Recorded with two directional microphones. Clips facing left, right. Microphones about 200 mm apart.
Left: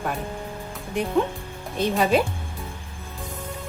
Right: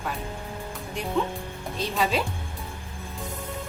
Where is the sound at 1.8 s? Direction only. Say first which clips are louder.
Left 6 dB; 55° left (ahead or behind).